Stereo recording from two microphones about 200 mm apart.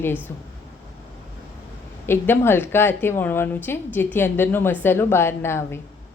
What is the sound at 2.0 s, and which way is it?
A woman's voice, 10° left (ahead or behind).